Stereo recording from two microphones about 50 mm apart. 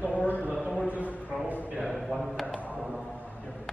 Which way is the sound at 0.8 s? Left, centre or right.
Right.